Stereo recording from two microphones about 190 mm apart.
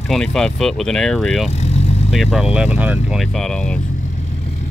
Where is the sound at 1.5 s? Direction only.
35° left (ahead or behind).